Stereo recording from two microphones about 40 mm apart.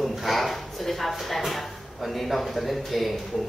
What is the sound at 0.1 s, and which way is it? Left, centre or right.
Speech, centre.